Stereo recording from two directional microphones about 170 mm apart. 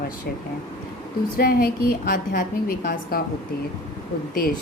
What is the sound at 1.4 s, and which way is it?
Speech, 65° left (ahead or behind).